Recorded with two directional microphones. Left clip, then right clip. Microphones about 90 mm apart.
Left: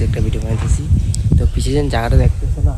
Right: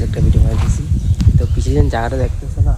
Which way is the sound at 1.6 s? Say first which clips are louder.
Even; 20° left (ahead or behind).